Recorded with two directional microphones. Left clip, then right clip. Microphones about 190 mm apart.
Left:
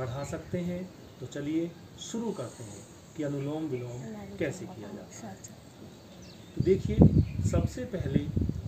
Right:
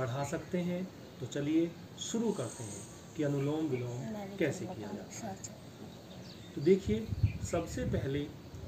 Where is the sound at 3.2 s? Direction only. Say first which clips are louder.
Even; centre (ahead or behind).